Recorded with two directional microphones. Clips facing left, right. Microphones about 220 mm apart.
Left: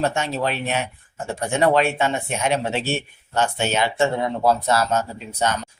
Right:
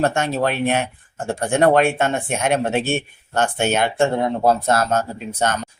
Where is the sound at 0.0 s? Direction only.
50° right (ahead or behind).